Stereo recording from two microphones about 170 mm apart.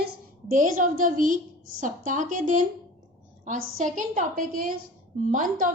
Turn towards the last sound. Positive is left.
turn(degrees=-50)  # may be behind; listen again after turning